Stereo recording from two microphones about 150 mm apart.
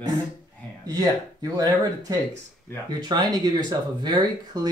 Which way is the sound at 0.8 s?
25° right (ahead or behind).